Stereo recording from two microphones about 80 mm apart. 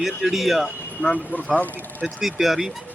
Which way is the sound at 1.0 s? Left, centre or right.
Centre.